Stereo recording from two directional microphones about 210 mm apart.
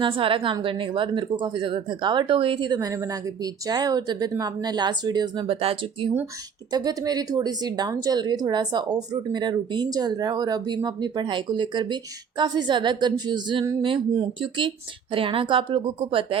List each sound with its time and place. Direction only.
0.0 s speech: 25° right (ahead or behind)